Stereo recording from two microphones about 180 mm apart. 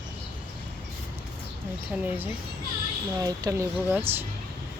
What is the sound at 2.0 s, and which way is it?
Speech, 10° right (ahead or behind).